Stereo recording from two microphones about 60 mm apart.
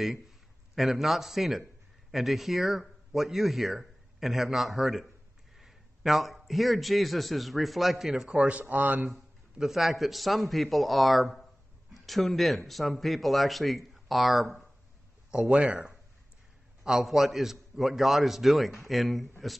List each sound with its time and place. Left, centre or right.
0.7 s a man's voice: centre
8.4 s speech: right
9.1 s a man's voice: centre
15.3 s speech: centre
16.8 s a man's voice: centre